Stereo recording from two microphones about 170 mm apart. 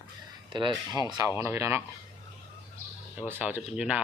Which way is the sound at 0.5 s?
25° right (ahead or behind).